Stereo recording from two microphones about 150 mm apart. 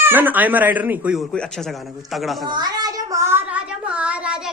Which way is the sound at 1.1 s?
5° left (ahead or behind).